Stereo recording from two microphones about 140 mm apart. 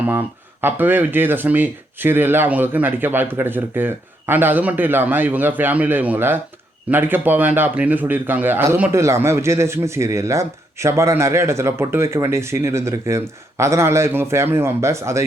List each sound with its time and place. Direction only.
0.1 s a man's voice: 15° right (ahead or behind)